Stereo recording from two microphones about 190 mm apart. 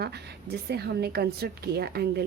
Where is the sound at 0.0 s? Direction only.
60° right (ahead or behind).